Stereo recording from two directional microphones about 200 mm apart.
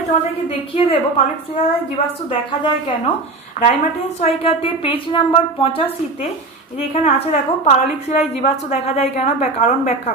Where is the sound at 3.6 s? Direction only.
35° left (ahead or behind).